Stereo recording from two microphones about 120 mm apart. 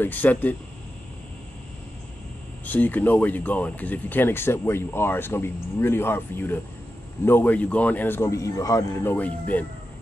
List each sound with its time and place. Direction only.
0.0 s speech: 15° left (ahead or behind)
2.6 s speech: 15° left (ahead or behind)